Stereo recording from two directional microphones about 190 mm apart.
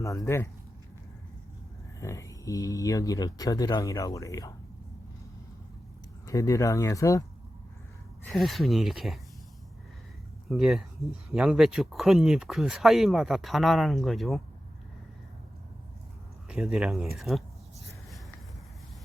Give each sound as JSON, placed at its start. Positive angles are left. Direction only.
{"t": 0.0, "sound": "speech", "side_deg": 15}
{"t": 2.0, "sound": "speech", "side_deg": 15}
{"t": 6.2, "sound": "speech", "side_deg": 15}
{"t": 8.3, "sound": "speech", "side_deg": 0}
{"t": 10.5, "sound": "speech", "side_deg": -5}
{"t": 16.5, "sound": "speech", "side_deg": -5}
{"t": 17.2, "sound": "a sound", "side_deg": 0}